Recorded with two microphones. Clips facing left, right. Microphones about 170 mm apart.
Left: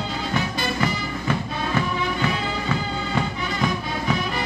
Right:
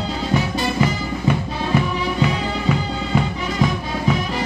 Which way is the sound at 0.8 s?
15° right (ahead or behind).